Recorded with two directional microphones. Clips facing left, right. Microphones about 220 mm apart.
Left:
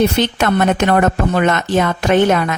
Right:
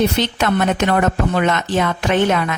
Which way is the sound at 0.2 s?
50° left (ahead or behind).